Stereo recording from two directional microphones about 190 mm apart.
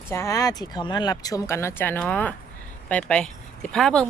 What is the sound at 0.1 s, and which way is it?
Speech, 15° left (ahead or behind).